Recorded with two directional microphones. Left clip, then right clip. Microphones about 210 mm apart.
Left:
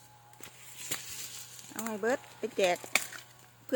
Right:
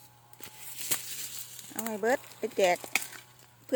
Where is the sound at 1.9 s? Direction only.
5° right (ahead or behind).